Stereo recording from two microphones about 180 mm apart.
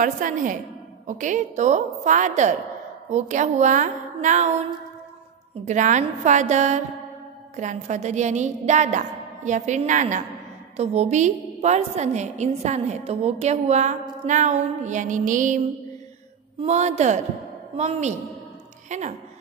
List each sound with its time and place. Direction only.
0.0 s a woman's voice: 45° right (ahead or behind)
5.7 s a woman's voice: 40° right (ahead or behind)
16.6 s a woman's voice: 40° right (ahead or behind)